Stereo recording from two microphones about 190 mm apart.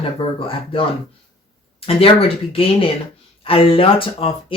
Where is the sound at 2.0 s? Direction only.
30° left (ahead or behind).